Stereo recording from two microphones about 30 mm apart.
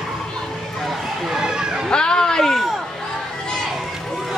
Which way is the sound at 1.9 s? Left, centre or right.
Left.